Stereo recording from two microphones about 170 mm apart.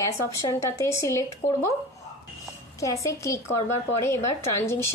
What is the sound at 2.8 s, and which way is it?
Speech, 20° left (ahead or behind).